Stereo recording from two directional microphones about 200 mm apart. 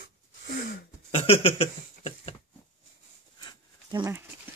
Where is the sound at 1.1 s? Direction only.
30° left (ahead or behind).